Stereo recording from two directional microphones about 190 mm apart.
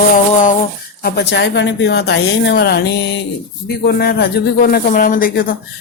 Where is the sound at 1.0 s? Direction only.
60° left (ahead or behind).